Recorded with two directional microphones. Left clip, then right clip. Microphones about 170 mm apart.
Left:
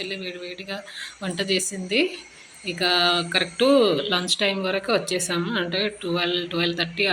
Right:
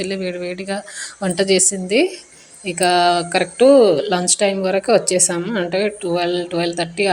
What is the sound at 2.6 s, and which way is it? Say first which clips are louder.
Speech: right 6 dB; 40° right (ahead or behind).